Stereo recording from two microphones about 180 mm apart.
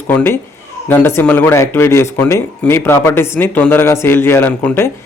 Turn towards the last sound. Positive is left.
turn(degrees=10)  # may be behind; listen again after turning